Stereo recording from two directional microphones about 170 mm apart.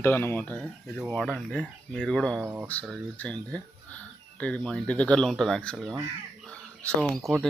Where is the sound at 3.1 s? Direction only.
10° left (ahead or behind).